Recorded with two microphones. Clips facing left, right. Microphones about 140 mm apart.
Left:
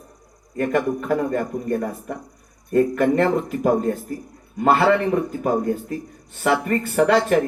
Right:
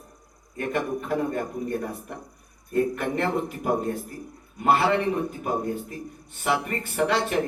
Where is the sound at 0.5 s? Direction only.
55° left (ahead or behind).